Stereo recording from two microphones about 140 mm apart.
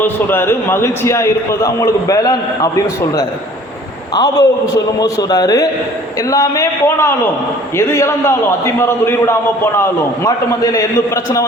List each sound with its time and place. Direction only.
0.0 s a man's voice: 15° left (ahead or behind)